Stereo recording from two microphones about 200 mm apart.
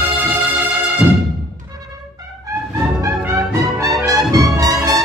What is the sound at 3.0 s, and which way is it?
Music, 15° right (ahead or behind).